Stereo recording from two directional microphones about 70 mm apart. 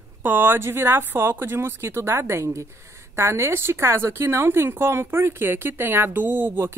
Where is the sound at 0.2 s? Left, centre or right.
Right.